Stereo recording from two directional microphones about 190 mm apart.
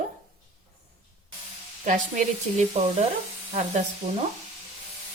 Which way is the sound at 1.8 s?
40° right (ahead or behind).